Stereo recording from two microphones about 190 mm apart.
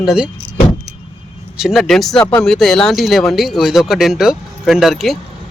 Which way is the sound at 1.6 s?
Centre (ahead or behind).